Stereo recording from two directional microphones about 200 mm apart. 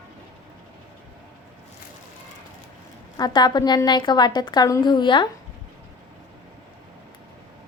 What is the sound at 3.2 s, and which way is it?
A woman's voice, 20° left (ahead or behind).